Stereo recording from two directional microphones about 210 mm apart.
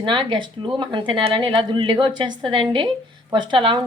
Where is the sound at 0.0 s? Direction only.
20° right (ahead or behind).